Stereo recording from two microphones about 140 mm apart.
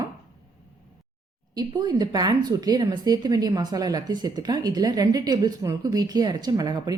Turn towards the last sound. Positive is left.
turn(degrees=-30)  # may be behind; listen again after turning